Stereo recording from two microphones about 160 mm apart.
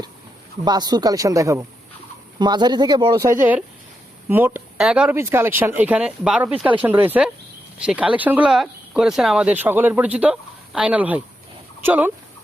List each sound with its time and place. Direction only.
0.6 s speech: 25° right (ahead or behind)